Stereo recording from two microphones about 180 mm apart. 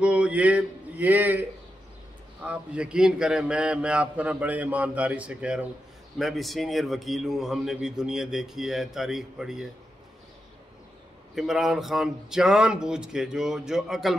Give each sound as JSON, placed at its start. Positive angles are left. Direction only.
{"t": 0.0, "sound": "a man's voice", "side_deg": -5}
{"t": 2.4, "sound": "a man's voice", "side_deg": -5}
{"t": 11.3, "sound": "a man's voice", "side_deg": 0}